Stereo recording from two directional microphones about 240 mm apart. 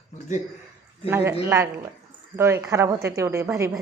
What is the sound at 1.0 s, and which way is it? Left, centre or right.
A woman's voice, centre.